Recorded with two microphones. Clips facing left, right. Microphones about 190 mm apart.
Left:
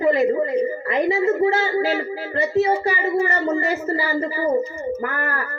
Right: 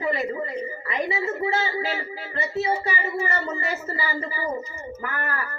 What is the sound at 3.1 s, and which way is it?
Speech, 50° left (ahead or behind).